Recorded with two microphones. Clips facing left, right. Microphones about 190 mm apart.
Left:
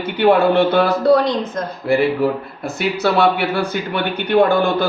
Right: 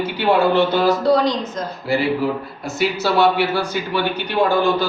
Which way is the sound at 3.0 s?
60° left (ahead or behind).